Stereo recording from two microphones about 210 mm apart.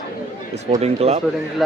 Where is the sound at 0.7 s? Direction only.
30° right (ahead or behind).